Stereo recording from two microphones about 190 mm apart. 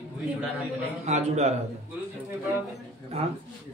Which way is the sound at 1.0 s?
35° right (ahead or behind).